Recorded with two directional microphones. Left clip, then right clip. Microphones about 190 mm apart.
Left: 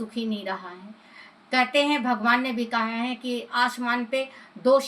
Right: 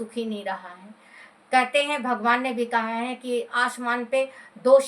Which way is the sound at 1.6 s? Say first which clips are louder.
Left 1 dB; 15° right (ahead or behind).